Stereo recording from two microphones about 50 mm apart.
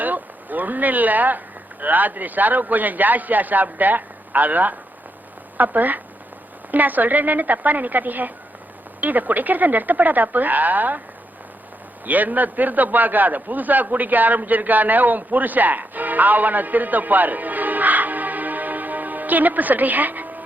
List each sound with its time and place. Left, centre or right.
0.0 s a man's voice: right
12.0 s a man's voice: right